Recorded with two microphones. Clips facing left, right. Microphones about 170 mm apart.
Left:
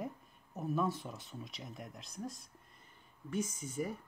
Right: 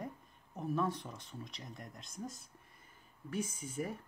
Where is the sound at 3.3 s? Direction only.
30° right (ahead or behind).